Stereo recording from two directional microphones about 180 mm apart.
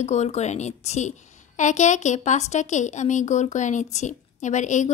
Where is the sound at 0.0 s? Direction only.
40° left (ahead or behind).